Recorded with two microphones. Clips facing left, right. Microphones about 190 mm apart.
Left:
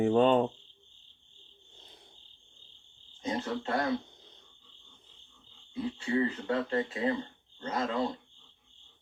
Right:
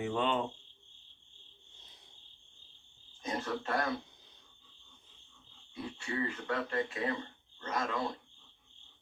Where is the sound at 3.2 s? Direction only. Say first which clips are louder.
Left 3 dB; 25° left (ahead or behind).